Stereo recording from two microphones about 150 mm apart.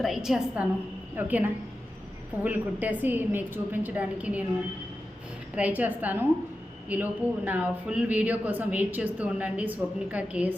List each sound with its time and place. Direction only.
0.0 s a woman's voice: centre (ahead or behind)
5.5 s a man's voice: 10° right (ahead or behind)